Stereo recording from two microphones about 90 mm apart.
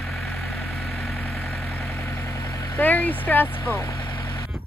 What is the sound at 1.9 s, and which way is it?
Vehicle, 30° left (ahead or behind).